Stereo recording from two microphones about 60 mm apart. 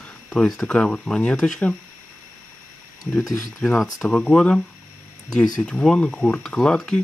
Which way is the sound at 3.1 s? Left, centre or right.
Centre.